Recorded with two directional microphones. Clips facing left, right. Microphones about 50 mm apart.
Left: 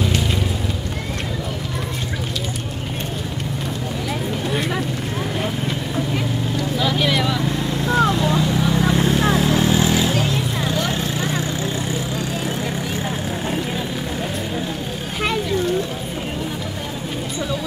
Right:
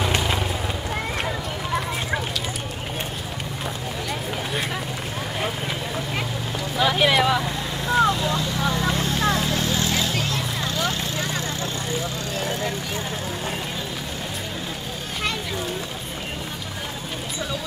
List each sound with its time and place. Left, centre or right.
0.0 s vehicle: centre
4.1 s a sound: centre
6.8 s vehicle: centre
7.4 s vehicle: centre